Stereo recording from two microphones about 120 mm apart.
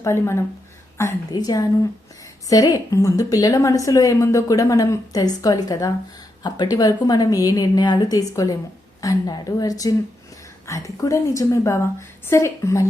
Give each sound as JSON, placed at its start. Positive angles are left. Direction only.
{"t": 0.0, "sound": "a woman's voice", "side_deg": 25}